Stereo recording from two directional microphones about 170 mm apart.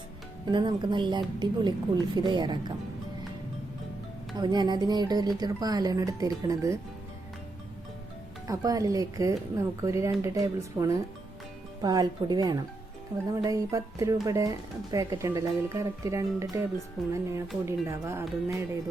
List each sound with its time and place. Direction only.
0.4 s speech: 25° right (ahead or behind)
4.4 s speech: 25° right (ahead or behind)
8.4 s speech: 20° right (ahead or behind)
17.7 s speech: 15° right (ahead or behind)